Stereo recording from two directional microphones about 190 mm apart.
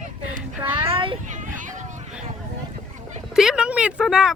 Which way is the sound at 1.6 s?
40° right (ahead or behind).